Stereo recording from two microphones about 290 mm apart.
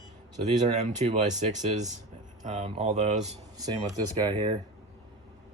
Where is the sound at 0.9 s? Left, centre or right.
Right.